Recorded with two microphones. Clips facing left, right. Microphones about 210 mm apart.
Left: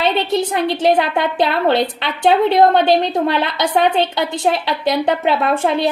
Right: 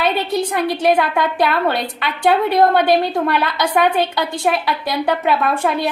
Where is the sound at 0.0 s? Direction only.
25° left (ahead or behind).